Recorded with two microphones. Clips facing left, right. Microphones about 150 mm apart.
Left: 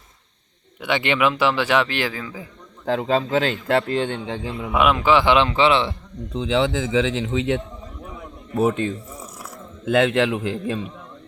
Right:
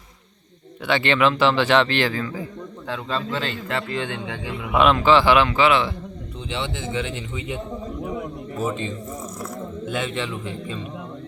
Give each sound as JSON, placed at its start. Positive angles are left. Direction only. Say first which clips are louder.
{"t": 0.9, "sound": "a man's voice", "louder": "right 1 dB", "side_deg": 15}
{"t": 3.0, "sound": "a man's voice", "louder": "left 6 dB", "side_deg": 50}
{"t": 4.8, "sound": "speech", "louder": "right 1 dB", "side_deg": 10}
{"t": 6.3, "sound": "speech", "louder": "left 10 dB", "side_deg": 90}
{"t": 8.5, "sound": "speech", "louder": "left 7 dB", "side_deg": 60}
{"t": 9.9, "sound": "a man's voice", "louder": "left 10 dB", "side_deg": 90}